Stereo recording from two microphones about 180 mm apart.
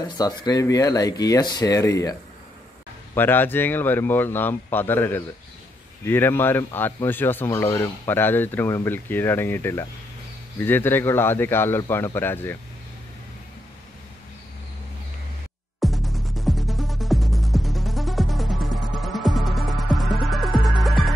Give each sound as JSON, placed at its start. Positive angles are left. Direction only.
{"t": 0.2, "sound": "speech", "side_deg": 20}
{"t": 3.2, "sound": "speech", "side_deg": 10}
{"t": 15.8, "sound": "music", "side_deg": 0}